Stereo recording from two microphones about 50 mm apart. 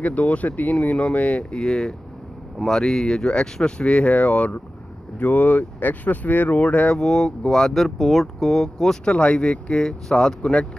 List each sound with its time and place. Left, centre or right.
0.0 s speech: left
7.0 s speech: centre
9.1 s speech: left